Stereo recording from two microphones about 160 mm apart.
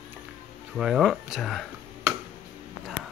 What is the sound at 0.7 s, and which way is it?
Speech, centre (ahead or behind).